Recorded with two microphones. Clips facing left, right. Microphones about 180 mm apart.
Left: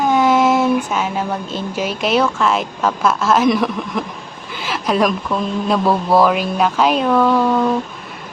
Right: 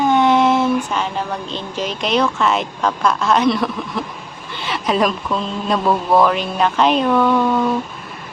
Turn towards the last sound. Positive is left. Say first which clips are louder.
# left 1 dB
turn(degrees=0)  # may be behind; listen again after turning